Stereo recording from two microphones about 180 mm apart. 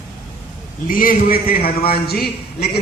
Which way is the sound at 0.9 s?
50° left (ahead or behind).